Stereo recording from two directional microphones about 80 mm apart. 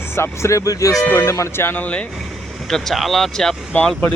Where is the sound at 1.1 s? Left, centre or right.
Left; by 2.0 s centre.